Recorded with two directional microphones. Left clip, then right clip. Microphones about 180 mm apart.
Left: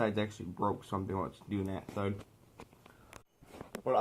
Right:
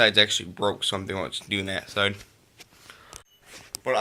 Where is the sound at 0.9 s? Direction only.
35° right (ahead or behind).